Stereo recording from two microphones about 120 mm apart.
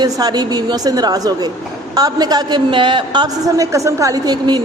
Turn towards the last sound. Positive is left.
turn(degrees=-35)  # may be behind; listen again after turning